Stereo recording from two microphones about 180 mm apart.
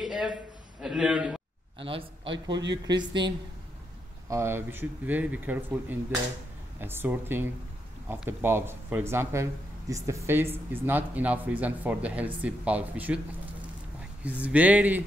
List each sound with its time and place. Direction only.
0.0 s a sound: centre (ahead or behind)
0.7 s a man's voice: 5° right (ahead or behind)
1.8 s a man's voice: 30° right (ahead or behind)
4.3 s speech: 15° right (ahead or behind)
14.4 s speech: 10° right (ahead or behind)